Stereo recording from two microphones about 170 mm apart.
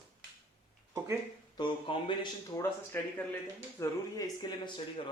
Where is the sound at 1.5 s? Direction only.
30° left (ahead or behind).